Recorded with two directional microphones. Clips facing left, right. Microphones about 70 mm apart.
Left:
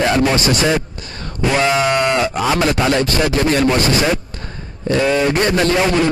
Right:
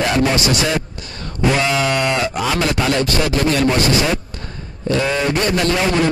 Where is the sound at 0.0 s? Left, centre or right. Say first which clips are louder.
Left 2 dB; left.